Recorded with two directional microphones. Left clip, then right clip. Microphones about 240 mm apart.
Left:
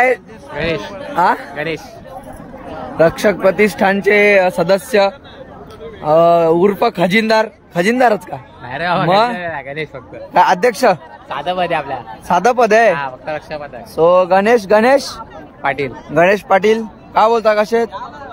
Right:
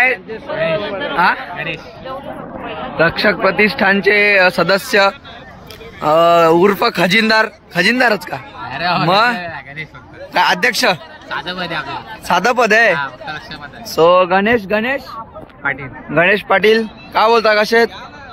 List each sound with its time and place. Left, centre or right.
0.0 s a man's voice: centre
3.0 s a man's voice: centre
16.1 s a man's voice: centre